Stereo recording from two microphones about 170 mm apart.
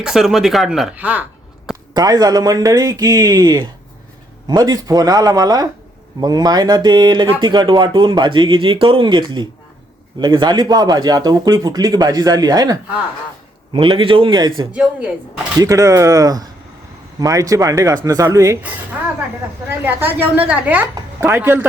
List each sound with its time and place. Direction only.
0.0 s speech: 5° right (ahead or behind)
1.9 s speech: 25° right (ahead or behind)
14.7 s a woman's voice: 10° right (ahead or behind)
15.5 s a woman's voice: 20° right (ahead or behind)
20.8 s speech: 20° right (ahead or behind)
21.2 s a woman's voice: 10° right (ahead or behind)